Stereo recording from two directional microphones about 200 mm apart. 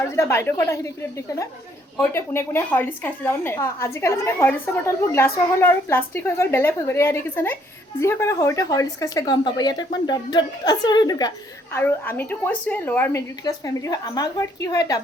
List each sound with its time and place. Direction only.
0.1 s a woman's voice: 15° left (ahead or behind)
2.0 s a woman's voice: 15° left (ahead or behind)